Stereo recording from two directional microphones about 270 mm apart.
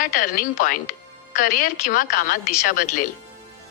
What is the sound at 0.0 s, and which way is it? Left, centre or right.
A woman's voice, left.